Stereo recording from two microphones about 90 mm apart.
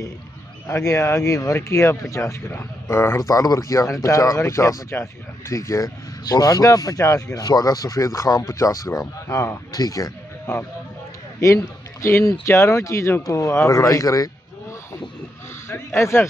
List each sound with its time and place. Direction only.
0.7 s speech: 35° left (ahead or behind)
9.7 s a man's voice: 45° left (ahead or behind)
15.7 s a sound: 30° left (ahead or behind)